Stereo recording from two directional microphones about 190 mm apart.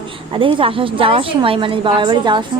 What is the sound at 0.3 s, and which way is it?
A woman's voice, 30° right (ahead or behind).